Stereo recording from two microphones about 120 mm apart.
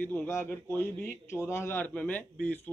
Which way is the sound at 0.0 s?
15° left (ahead or behind).